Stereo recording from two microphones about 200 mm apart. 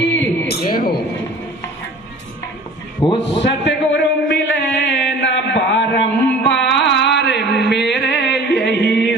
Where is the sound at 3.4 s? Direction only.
60° left (ahead or behind).